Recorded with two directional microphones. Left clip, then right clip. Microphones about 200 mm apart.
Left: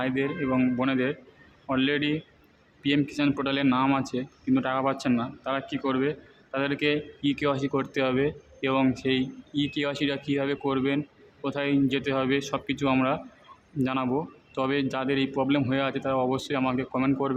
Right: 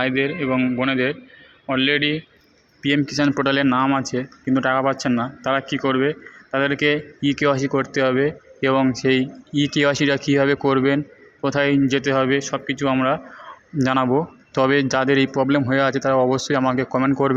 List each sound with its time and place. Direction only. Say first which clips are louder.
0.0 s speech: right 7 dB; 15° right (ahead or behind)
13.7 s speech: right 9 dB; 30° right (ahead or behind)